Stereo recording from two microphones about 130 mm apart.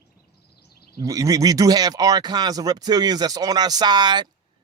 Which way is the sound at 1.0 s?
25° right (ahead or behind).